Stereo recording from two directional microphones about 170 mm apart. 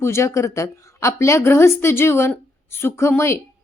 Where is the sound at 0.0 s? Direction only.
15° left (ahead or behind).